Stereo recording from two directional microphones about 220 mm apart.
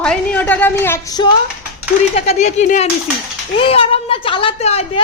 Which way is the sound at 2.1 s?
30° left (ahead or behind).